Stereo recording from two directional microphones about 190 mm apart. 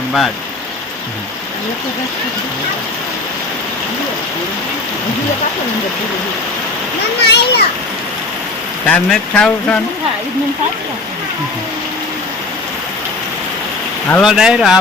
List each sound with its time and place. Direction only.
7.2 s a child's voice: 60° left (ahead or behind)
8.9 s speech: 5° left (ahead or behind)
14.1 s speech: centre (ahead or behind)